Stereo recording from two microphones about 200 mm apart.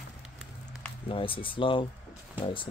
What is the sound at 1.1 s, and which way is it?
Speech, 25° left (ahead or behind).